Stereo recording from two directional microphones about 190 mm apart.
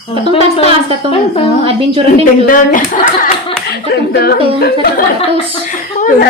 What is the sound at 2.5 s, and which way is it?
A woman's voice, 45° left (ahead or behind).